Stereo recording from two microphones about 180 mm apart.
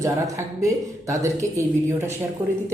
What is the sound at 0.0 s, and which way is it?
Speech, 15° right (ahead or behind).